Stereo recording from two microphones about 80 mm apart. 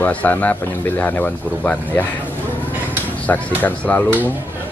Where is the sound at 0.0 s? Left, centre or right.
Left.